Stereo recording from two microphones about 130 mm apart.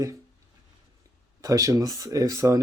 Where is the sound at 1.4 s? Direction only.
25° right (ahead or behind).